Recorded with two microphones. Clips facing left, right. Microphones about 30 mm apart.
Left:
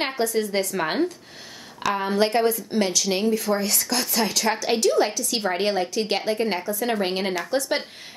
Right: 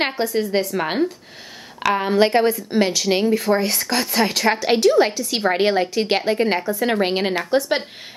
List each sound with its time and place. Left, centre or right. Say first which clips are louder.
0.0 s a woman's voice: right 3 dB; right
0.7 s speech: right 2 dB; centre
1.9 s speech: right 5 dB; right